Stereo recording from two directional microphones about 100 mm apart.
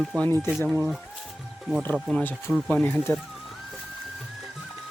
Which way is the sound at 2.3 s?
Centre (ahead or behind).